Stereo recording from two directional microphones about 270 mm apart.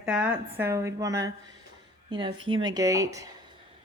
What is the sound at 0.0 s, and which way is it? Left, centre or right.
A woman's voice, centre.